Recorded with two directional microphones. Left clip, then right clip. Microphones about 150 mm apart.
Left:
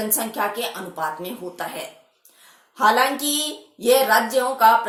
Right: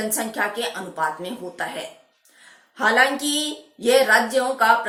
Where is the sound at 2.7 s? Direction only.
20° left (ahead or behind).